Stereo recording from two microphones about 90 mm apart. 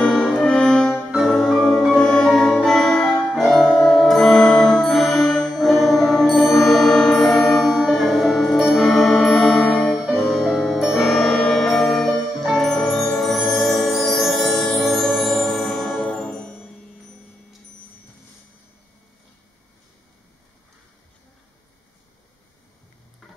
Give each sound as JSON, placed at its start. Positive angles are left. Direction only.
{"t": 0.0, "sound": "music", "side_deg": 10}
{"t": 16.0, "sound": "music", "side_deg": 15}